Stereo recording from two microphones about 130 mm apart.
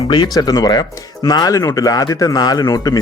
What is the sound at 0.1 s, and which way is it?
Speech, 35° left (ahead or behind).